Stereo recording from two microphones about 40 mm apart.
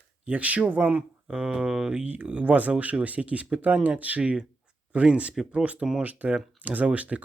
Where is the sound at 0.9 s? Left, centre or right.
Right.